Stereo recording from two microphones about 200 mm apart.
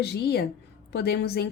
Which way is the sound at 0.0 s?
55° left (ahead or behind).